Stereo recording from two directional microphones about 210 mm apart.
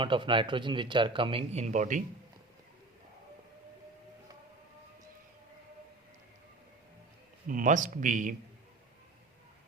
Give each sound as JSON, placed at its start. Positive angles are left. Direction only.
{"t": 0.0, "sound": "speech", "side_deg": -25}
{"t": 7.4, "sound": "a man's voice", "side_deg": -40}